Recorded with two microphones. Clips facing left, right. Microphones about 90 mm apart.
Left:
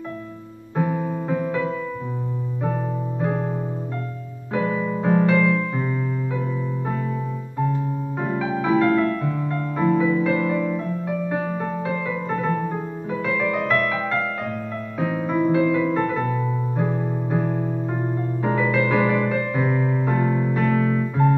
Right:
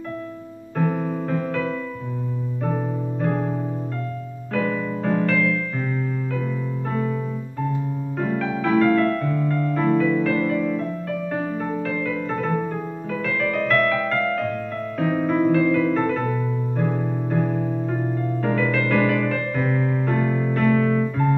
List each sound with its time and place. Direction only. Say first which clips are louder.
0.7 s music: even; 10° left (ahead or behind)
4.6 s music: left 1 dB; 15° left (ahead or behind)
8.2 s music: right 1 dB; 15° left (ahead or behind)
10.6 s music: right 1 dB; 10° left (ahead or behind)
13.4 s music: right 2 dB; 10° left (ahead or behind)
18.4 s music: left 2 dB; 15° left (ahead or behind)